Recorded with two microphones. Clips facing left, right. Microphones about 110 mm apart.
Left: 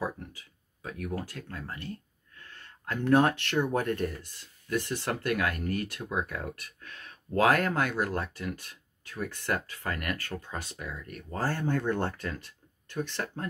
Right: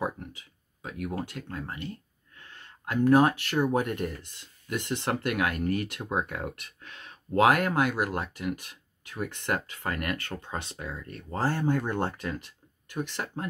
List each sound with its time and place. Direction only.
0.8 s speech: 20° right (ahead or behind)